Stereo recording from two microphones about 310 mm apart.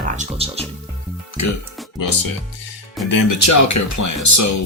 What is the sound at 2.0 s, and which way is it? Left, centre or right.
Speech, left.